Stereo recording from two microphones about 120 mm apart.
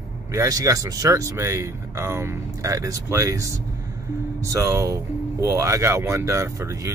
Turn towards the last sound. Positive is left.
turn(degrees=-25)  # may be behind; listen again after turning